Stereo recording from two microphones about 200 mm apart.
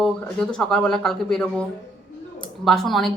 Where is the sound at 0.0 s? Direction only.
5° left (ahead or behind).